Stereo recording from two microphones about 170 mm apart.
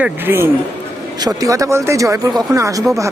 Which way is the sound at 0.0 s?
15° right (ahead or behind).